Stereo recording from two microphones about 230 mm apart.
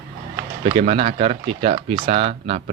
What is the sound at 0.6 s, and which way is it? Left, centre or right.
Speech, right.